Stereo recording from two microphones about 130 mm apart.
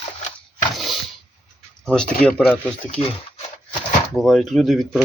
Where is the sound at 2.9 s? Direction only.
50° left (ahead or behind).